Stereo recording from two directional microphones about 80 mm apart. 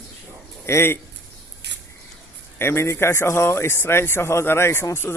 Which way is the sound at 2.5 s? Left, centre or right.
Left.